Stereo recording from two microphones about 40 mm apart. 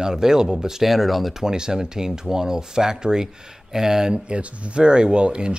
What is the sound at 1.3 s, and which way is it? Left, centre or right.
Speech, centre.